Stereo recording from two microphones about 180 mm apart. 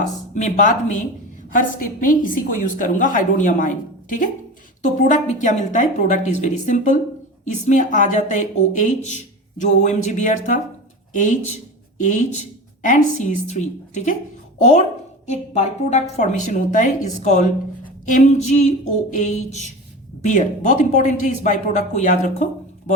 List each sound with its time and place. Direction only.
0.0 s speech: 40° left (ahead or behind)
18.1 s a sound: 40° left (ahead or behind)
20.2 s speech: 45° left (ahead or behind)